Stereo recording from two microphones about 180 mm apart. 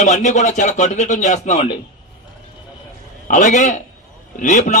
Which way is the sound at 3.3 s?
45° left (ahead or behind).